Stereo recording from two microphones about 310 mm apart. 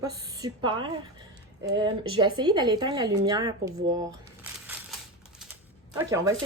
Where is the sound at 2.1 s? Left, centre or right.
Centre.